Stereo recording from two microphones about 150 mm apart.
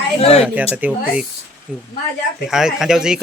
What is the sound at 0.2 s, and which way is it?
Speech, 40° left (ahead or behind).